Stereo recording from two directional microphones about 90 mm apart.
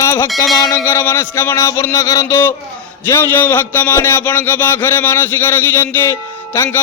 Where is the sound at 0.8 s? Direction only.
30° left (ahead or behind).